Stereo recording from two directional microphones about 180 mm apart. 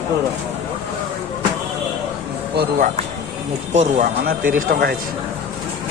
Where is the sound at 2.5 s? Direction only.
50° right (ahead or behind).